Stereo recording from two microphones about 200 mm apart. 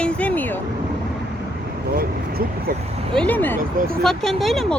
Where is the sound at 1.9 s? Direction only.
50° right (ahead or behind).